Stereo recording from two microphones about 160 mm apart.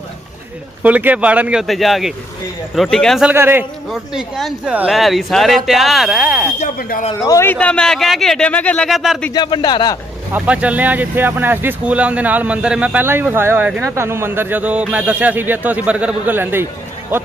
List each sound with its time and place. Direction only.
0.8 s speech: 10° right (ahead or behind)
3.3 s speech: 15° right (ahead or behind)
3.9 s speech: 5° right (ahead or behind)
6.8 s speech: 60° left (ahead or behind)
7.2 s a man's voice: 20° left (ahead or behind)
7.5 s speech: 5° left (ahead or behind)
9.3 s a man's voice: 25° left (ahead or behind)
10.3 s speech: 10° right (ahead or behind)